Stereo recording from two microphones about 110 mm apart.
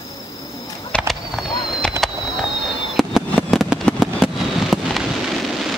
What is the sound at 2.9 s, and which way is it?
Fireworks, 5° right (ahead or behind).